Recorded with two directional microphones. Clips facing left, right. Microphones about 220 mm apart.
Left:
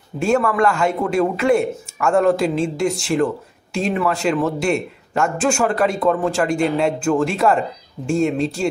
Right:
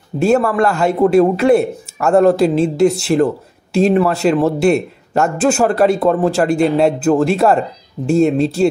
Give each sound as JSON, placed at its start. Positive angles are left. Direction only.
{"t": 0.2, "sound": "a man's voice", "side_deg": -35}